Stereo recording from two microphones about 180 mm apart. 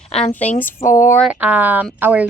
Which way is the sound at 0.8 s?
45° left (ahead or behind).